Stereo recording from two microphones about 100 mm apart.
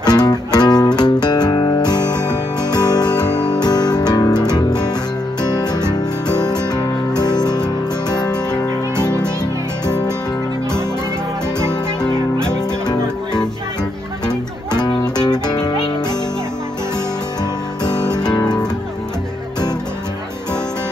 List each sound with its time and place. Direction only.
0.0 s music: 45° left (ahead or behind)
3.6 s guitar: 45° left (ahead or behind)
4.4 s music: 45° left (ahead or behind)
14.2 s music: 45° left (ahead or behind)
17.8 s guitar: 45° left (ahead or behind)